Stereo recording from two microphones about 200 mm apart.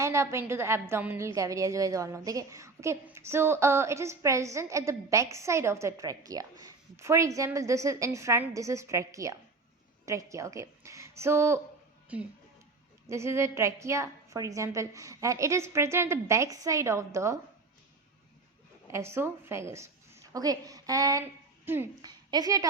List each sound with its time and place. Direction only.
0.0 s a woman's voice: 15° right (ahead or behind)
13.1 s a woman's voice: 15° right (ahead or behind)
18.9 s a woman's voice: 15° right (ahead or behind)